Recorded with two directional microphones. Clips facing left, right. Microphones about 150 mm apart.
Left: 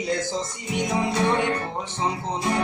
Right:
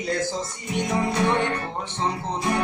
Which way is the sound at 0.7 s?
15° left (ahead or behind).